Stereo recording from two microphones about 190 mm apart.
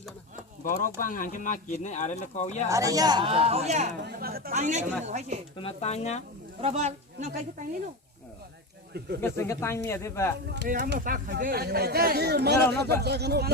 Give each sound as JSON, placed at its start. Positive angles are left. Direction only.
{"t": 0.6, "sound": "speech", "side_deg": 45}
{"t": 2.6, "sound": "speech", "side_deg": -15}
{"t": 4.0, "sound": "speech", "side_deg": -55}
{"t": 4.5, "sound": "a woman's voice", "side_deg": -40}
{"t": 5.5, "sound": "speech", "side_deg": 30}
{"t": 6.6, "sound": "speech", "side_deg": -35}
{"t": 8.9, "sound": "speech", "side_deg": -60}
{"t": 9.2, "sound": "speech", "side_deg": 15}
{"t": 10.5, "sound": "speech", "side_deg": -60}